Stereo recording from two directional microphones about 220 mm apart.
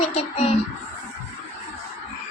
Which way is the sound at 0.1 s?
30° left (ahead or behind).